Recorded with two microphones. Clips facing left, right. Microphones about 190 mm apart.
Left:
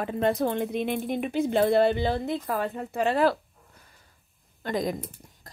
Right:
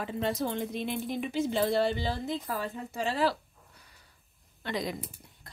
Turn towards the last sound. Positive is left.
turn(degrees=45)  # may be behind; listen again after turning